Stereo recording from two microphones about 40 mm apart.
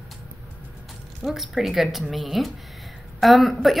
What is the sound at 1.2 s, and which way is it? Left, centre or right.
Speech, centre.